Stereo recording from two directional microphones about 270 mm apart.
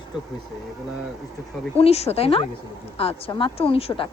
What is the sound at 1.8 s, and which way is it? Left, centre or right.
A woman's voice, left.